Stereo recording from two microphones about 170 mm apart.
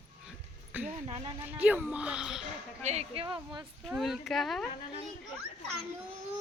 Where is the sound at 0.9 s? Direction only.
45° right (ahead or behind).